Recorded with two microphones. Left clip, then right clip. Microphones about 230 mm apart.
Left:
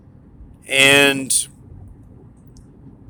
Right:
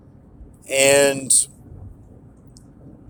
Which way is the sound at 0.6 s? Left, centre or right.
Centre.